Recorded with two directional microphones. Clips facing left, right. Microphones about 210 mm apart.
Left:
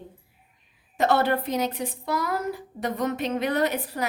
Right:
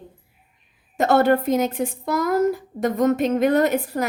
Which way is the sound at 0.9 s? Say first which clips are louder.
Right 5 dB; 45° right (ahead or behind).